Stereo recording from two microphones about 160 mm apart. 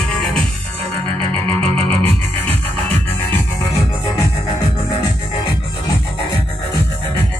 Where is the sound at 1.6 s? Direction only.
40° right (ahead or behind).